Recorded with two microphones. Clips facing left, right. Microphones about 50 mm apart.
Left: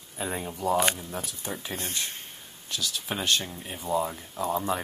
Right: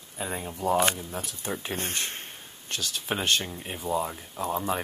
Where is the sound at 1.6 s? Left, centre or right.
Right.